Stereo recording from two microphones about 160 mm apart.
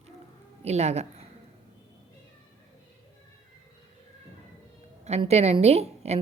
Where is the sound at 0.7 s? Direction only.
45° right (ahead or behind).